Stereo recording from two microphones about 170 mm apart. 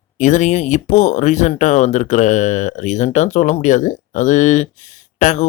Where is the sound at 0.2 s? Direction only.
45° left (ahead or behind).